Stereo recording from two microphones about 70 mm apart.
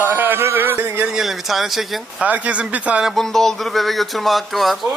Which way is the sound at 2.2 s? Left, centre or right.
Right.